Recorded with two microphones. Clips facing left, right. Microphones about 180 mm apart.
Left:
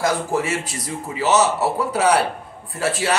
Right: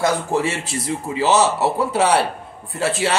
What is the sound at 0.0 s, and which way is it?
Speech, 25° right (ahead or behind).